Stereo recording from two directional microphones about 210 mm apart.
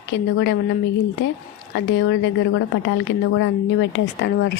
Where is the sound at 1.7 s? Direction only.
60° left (ahead or behind).